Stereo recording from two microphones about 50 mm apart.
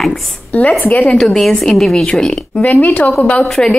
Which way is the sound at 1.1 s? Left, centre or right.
Centre.